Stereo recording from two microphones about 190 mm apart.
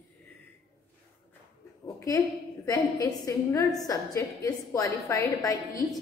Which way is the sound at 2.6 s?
20° left (ahead or behind).